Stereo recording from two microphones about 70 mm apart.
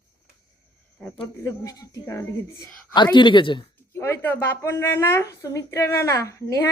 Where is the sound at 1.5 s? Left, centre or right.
Left.